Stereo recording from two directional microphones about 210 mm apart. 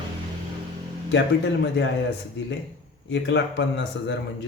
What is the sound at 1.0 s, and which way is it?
Speech, 55° left (ahead or behind).